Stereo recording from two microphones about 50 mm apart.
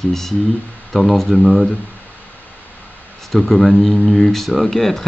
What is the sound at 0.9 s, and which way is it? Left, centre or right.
Speech, centre.